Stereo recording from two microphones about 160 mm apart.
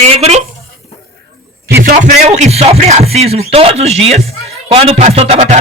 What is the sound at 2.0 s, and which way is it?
Music, 45° right (ahead or behind).